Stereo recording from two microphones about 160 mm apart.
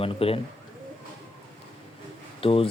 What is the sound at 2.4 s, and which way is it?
Speech, 35° left (ahead or behind).